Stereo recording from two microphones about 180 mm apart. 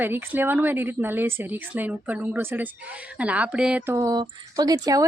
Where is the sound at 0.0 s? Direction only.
10° right (ahead or behind).